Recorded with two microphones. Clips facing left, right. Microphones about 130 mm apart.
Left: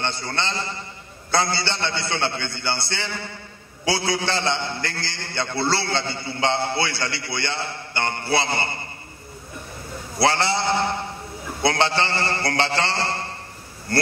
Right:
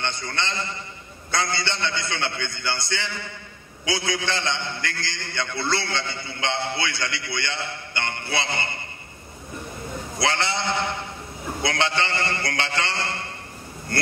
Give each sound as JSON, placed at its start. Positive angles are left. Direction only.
{"t": 0.0, "sound": "a man's voice", "side_deg": 35}
{"t": 10.1, "sound": "a man's voice", "side_deg": 35}